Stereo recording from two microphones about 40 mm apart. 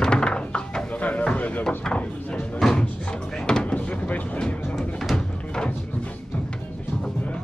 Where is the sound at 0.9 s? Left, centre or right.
Left.